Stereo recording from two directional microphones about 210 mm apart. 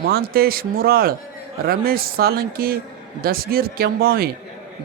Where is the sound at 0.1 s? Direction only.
45° right (ahead or behind).